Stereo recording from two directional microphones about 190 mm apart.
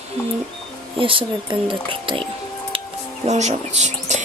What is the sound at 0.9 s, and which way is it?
Speech, 25° right (ahead or behind).